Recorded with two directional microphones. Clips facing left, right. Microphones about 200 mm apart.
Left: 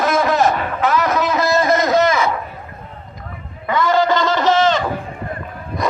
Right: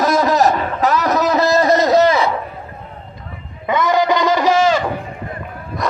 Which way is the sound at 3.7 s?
20° right (ahead or behind).